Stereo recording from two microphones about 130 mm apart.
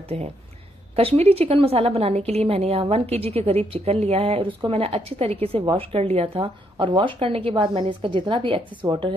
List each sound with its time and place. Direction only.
0.1 s a woman's voice: 50° right (ahead or behind)
8.8 s a woman's voice: 30° right (ahead or behind)